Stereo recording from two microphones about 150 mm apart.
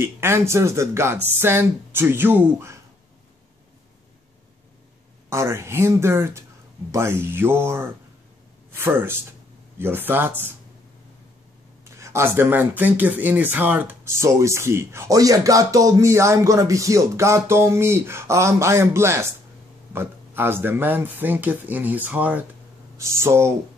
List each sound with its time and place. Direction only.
0.0 s speech: 15° right (ahead or behind)
5.3 s speech: 20° right (ahead or behind)
11.8 s speech: 20° right (ahead or behind)